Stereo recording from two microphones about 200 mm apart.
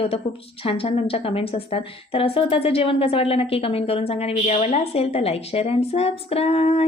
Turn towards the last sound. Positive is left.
turn(degrees=30)  # may be behind; listen again after turning